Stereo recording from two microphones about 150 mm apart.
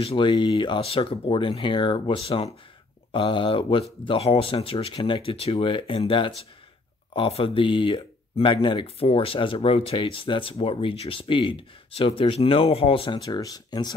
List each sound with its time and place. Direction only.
0.0 s speech: 35° left (ahead or behind)